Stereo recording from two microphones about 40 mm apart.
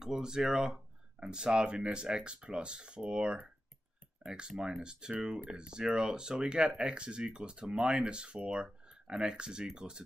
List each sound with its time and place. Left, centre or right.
0.0 s speech: centre